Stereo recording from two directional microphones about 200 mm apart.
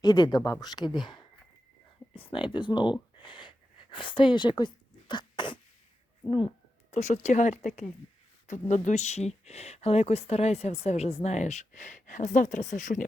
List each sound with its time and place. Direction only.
0.0 s speech: 20° left (ahead or behind)
6.9 s speech: 35° left (ahead or behind)
8.7 s speech: 35° left (ahead or behind)